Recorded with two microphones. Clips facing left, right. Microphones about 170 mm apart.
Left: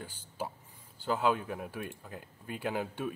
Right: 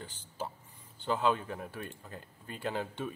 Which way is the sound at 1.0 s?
10° left (ahead or behind).